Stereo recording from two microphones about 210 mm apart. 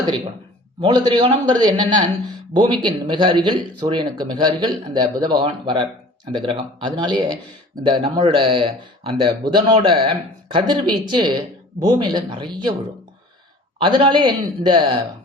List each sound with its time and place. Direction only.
0.8 s speech: 20° right (ahead or behind)
13.8 s speech: 25° right (ahead or behind)